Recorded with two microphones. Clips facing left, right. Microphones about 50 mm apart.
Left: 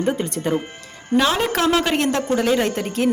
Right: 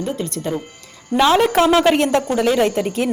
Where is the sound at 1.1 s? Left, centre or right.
Left.